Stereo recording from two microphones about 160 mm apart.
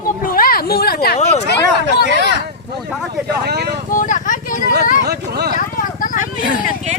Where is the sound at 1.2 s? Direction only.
40° left (ahead or behind).